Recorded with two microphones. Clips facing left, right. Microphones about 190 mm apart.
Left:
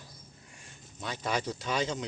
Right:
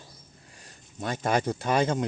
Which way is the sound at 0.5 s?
40° right (ahead or behind).